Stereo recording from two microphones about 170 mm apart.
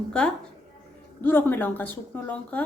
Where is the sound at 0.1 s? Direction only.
5° left (ahead or behind).